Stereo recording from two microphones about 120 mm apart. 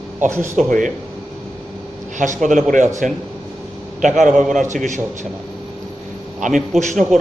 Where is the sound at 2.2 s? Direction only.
90° right.